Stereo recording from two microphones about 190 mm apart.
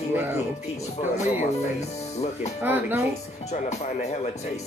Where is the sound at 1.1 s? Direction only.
35° left (ahead or behind).